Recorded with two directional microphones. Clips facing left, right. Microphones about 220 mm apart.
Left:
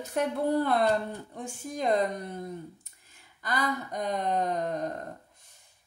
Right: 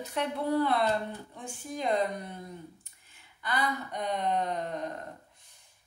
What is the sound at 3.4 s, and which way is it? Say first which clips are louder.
Speech: left 1 dB; 40° left (ahead or behind).